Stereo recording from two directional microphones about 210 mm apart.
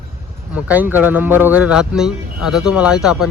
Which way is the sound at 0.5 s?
5° right (ahead or behind).